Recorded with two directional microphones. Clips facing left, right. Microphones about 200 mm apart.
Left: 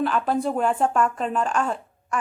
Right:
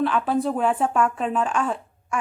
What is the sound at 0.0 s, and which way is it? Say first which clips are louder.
A woman's voice: right 1 dB; centre (ahead or behind).